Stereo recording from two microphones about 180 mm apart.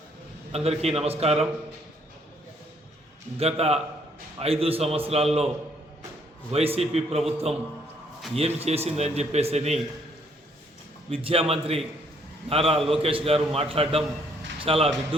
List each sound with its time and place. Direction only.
0.5 s a man's voice: 35° right (ahead or behind)
3.3 s a man's voice: 35° right (ahead or behind)
6.5 s a man's voice: 35° right (ahead or behind)
11.1 s a man's voice: 30° right (ahead or behind)